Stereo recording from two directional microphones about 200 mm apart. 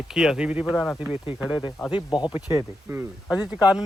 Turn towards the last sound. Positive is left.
turn(degrees=-5)  # may be behind; listen again after turning